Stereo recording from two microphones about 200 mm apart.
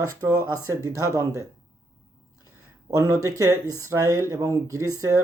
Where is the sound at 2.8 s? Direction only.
15° right (ahead or behind).